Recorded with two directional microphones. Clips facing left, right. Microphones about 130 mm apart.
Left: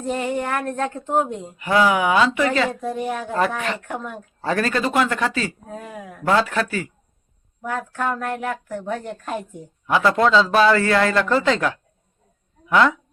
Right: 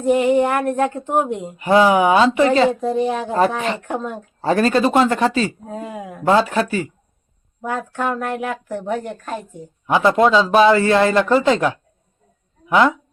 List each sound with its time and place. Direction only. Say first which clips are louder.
0.0 s a woman's voice: right 9 dB; 15° right (ahead or behind)
1.6 s a woman's voice: right 5 dB; 30° right (ahead or behind)